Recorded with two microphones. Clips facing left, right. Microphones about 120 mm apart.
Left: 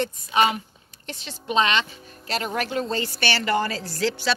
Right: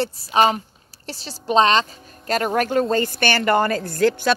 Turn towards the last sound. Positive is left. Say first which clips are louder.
# right 6 dB
turn(degrees=-50)  # may be behind; listen again after turning